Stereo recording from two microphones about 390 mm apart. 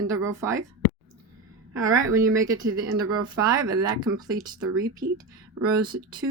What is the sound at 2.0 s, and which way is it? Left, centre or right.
Speech, centre.